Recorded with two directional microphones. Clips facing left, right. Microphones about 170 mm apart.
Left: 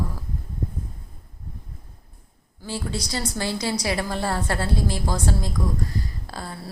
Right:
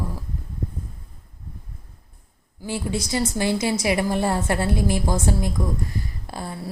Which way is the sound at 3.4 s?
20° right (ahead or behind).